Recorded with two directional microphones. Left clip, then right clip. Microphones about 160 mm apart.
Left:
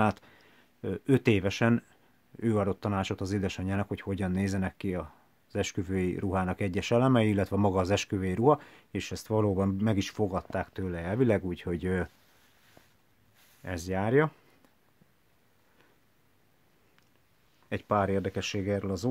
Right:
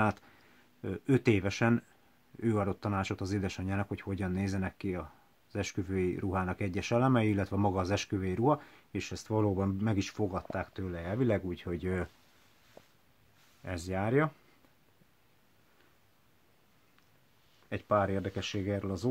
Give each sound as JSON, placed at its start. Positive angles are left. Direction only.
{"t": 0.0, "sound": "speech", "side_deg": 30}
{"t": 13.6, "sound": "speech", "side_deg": 30}
{"t": 17.6, "sound": "speech", "side_deg": 40}